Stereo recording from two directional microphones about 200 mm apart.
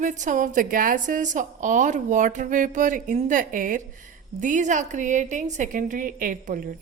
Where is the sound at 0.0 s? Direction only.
40° right (ahead or behind).